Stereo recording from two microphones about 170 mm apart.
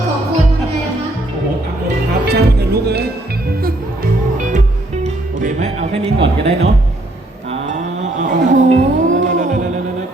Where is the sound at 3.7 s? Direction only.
55° right (ahead or behind).